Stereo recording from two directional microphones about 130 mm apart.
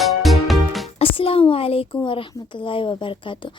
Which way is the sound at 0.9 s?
45° left (ahead or behind).